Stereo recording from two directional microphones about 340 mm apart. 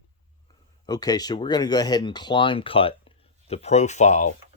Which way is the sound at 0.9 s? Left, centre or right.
Centre.